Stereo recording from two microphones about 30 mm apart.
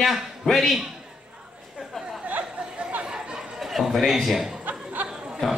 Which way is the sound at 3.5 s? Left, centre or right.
Centre.